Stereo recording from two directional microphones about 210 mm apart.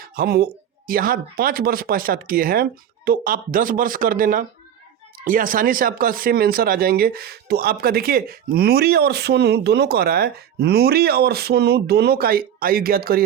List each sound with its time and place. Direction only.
0.0 s speech: 45° right (ahead or behind)